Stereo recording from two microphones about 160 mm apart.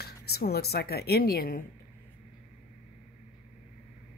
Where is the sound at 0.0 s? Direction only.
85° left; by 1.6 s 65° left (ahead or behind).